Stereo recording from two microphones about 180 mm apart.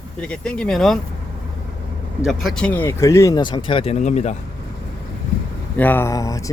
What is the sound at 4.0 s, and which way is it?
Speech, 40° left (ahead or behind).